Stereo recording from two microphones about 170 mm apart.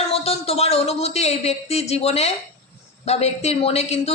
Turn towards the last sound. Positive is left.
turn(degrees=40)  # may be behind; listen again after turning